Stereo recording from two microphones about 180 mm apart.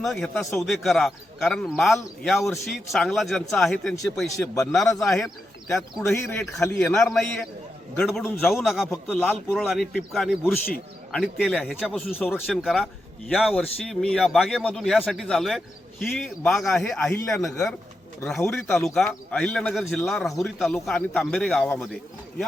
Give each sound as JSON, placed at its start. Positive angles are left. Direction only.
{"t": 0.0, "sound": "a man's voice", "side_deg": 0}
{"t": 4.3, "sound": "a man's voice", "side_deg": 15}
{"t": 4.8, "sound": "a man's voice", "side_deg": 0}
{"t": 5.2, "sound": "a man's voice", "side_deg": 15}
{"t": 6.9, "sound": "a man's voice", "side_deg": 5}
{"t": 8.6, "sound": "a man's voice", "side_deg": 0}